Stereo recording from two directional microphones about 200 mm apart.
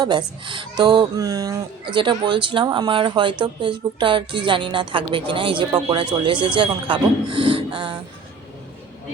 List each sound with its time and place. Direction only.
0.0 s speech: 20° right (ahead or behind)